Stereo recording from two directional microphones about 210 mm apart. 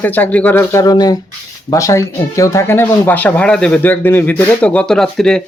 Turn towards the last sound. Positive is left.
turn(degrees=5)  # may be behind; listen again after turning